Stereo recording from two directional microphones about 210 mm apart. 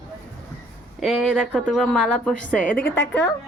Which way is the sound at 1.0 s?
Centre (ahead or behind).